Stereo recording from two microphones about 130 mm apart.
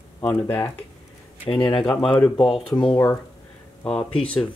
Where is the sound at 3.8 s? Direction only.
5° left (ahead or behind).